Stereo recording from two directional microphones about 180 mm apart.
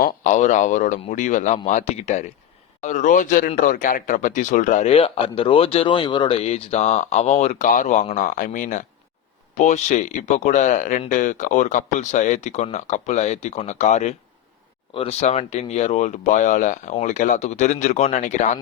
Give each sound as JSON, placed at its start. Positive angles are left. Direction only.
{"t": 0.0, "sound": "a man's voice", "side_deg": 40}
{"t": 15.2, "sound": "speech", "side_deg": 35}